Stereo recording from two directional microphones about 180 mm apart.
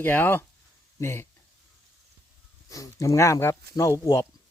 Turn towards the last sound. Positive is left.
turn(degrees=15)  # may be behind; listen again after turning